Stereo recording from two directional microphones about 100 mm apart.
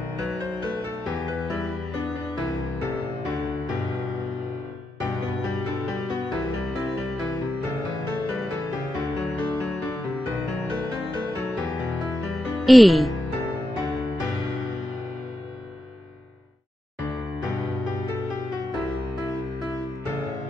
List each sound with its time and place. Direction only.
12.6 s speech: centre (ahead or behind)